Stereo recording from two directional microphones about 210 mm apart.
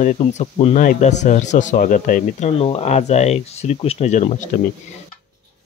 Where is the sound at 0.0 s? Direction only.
35° left (ahead or behind).